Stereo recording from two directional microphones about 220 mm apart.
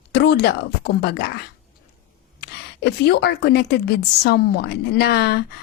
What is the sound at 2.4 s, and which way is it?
A woman's voice, 50° left (ahead or behind).